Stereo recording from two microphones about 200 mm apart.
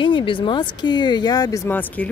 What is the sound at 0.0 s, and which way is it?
Speech, 25° left (ahead or behind).